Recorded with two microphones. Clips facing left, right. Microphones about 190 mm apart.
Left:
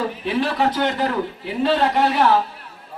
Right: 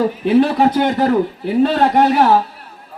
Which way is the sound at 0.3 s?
50° right (ahead or behind).